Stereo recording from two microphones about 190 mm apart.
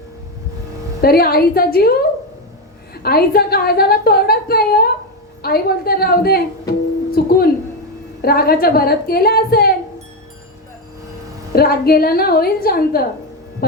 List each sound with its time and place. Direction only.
1.0 s a woman's voice: 55° left (ahead or behind)
7.1 s a sound: 50° left (ahead or behind)
8.2 s speech: 55° left (ahead or behind)
11.5 s speech: 55° left (ahead or behind)